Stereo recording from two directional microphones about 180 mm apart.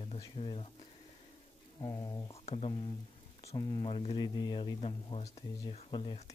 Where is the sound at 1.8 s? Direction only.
20° left (ahead or behind).